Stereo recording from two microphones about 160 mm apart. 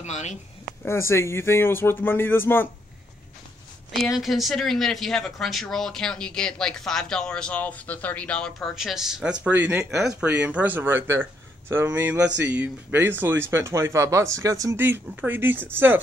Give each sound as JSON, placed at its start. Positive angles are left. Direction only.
{"t": 0.0, "sound": "speech", "side_deg": 45}
{"t": 0.8, "sound": "speech", "side_deg": 15}
{"t": 3.9, "sound": "speech", "side_deg": 0}